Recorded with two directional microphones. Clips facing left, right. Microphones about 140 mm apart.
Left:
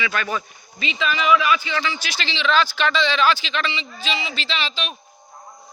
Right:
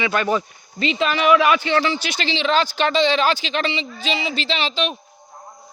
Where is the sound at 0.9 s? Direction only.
65° right (ahead or behind).